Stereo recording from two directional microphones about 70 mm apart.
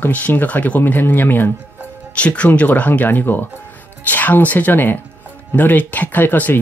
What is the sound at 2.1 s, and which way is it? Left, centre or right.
Speech, centre.